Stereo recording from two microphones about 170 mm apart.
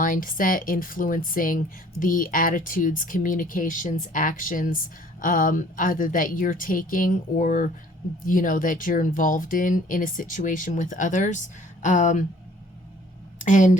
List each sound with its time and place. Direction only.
0.0 s speech: 50° left (ahead or behind)
13.4 s speech: 45° left (ahead or behind)